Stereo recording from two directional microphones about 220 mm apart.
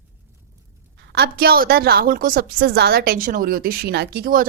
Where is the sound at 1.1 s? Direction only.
45° right (ahead or behind).